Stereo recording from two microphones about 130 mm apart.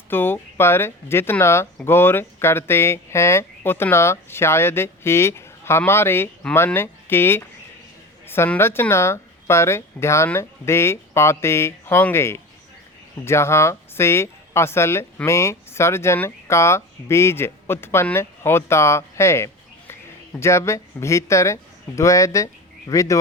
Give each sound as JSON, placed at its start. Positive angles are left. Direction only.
{"t": 0.1, "sound": "speech", "side_deg": 15}